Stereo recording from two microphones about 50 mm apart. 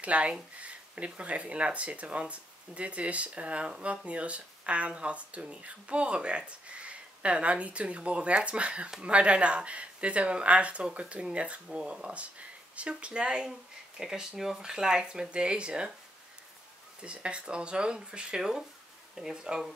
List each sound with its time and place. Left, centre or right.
0.0 s speech: right
17.0 s speech: right